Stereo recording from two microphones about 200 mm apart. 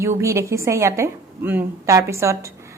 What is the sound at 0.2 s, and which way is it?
Speech, 15° right (ahead or behind).